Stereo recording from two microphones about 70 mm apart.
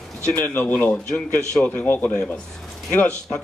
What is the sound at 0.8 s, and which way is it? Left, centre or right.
Speech, centre.